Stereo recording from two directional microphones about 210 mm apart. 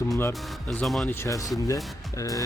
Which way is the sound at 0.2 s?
10° left (ahead or behind).